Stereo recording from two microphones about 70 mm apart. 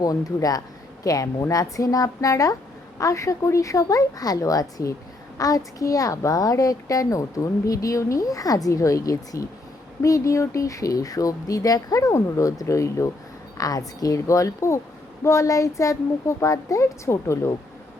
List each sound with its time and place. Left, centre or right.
0.0 s a child's voice: left
13.6 s speech: left